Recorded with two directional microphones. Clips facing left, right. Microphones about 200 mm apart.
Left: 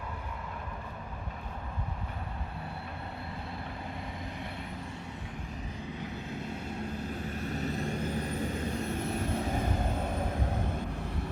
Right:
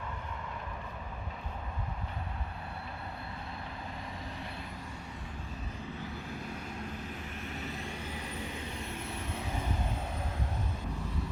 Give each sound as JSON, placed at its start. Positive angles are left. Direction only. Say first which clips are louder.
{"t": 6.0, "sound": "vehicle", "louder": "left 3 dB", "side_deg": 20}
{"t": 7.3, "sound": "vehicle", "louder": "left 7 dB", "side_deg": 40}